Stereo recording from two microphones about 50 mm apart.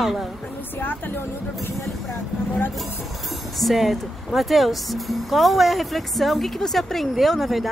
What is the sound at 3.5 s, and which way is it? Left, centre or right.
Speech, centre.